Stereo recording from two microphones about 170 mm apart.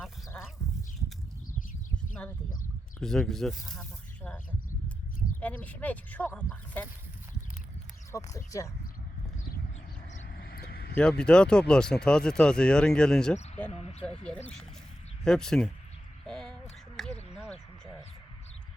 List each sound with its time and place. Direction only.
3.0 s speech: centre (ahead or behind)
5.4 s speech: 10° left (ahead or behind)
8.1 s speech: 20° left (ahead or behind)
10.3 s vehicle: 65° left (ahead or behind)
11.2 s speech: 5° left (ahead or behind)
13.7 s speech: 40° left (ahead or behind)
14.3 s speech: 5° left (ahead or behind)
16.2 s a sound: 5° left (ahead or behind)